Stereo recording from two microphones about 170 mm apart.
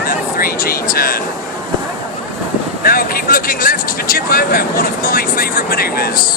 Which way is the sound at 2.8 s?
60° left (ahead or behind).